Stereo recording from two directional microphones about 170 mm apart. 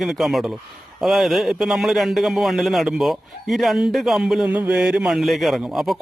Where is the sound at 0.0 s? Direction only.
Centre (ahead or behind).